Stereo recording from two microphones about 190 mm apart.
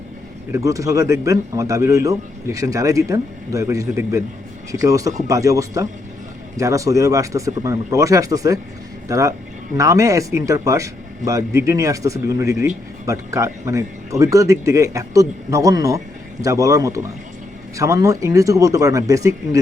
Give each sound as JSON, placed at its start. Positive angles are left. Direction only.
{"t": 0.5, "sound": "speech", "side_deg": -15}